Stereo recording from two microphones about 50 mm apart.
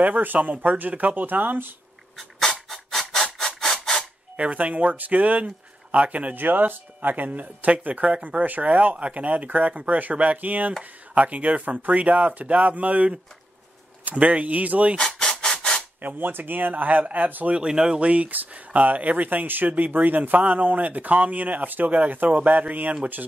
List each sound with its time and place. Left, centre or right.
0.0 s speech: right
2.1 s dog: centre
2.7 s a sound: centre
4.4 s speech: right
15.0 s rub: centre
16.0 s speech: right
17.6 s speech: centre; by 22.9 s right